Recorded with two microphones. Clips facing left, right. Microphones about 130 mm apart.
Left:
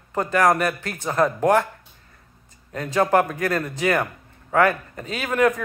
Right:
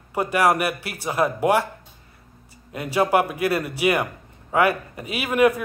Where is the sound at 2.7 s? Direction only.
10° right (ahead or behind).